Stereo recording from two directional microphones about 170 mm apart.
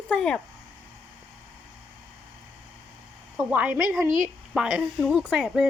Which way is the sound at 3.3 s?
10° right (ahead or behind).